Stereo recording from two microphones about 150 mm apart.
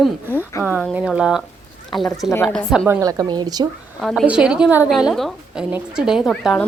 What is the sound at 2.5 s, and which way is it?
Speech, 5° left (ahead or behind).